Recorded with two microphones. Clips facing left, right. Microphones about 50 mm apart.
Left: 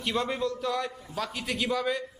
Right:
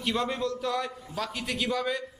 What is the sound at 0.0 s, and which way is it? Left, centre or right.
A man's voice, centre.